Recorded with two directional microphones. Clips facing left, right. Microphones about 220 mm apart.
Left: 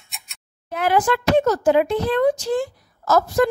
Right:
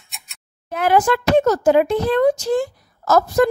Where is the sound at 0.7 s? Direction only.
45° right (ahead or behind).